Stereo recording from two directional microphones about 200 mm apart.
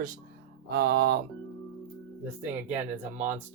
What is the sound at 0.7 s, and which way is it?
Speech, 55° right (ahead or behind).